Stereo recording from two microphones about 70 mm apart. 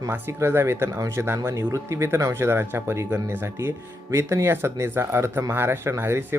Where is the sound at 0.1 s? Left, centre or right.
Right.